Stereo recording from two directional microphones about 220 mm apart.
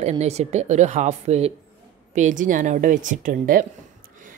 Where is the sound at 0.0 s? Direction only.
30° right (ahead or behind).